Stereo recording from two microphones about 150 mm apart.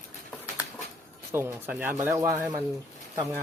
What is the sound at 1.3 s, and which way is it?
Speech, 15° right (ahead or behind).